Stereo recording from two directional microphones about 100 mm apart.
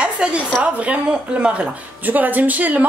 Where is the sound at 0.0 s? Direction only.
10° right (ahead or behind).